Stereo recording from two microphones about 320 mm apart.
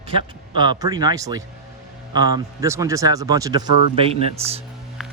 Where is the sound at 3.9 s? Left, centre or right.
Centre.